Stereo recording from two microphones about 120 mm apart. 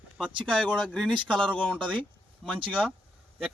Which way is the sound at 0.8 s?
5° left (ahead or behind).